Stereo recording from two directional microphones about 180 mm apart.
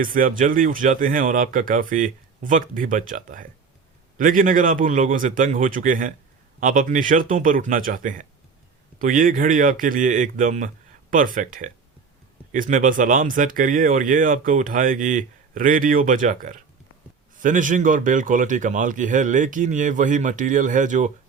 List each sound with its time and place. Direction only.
0.0 s speech: 50° right (ahead or behind)